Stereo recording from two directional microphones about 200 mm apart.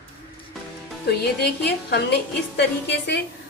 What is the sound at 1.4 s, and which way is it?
A woman's voice, 55° left (ahead or behind).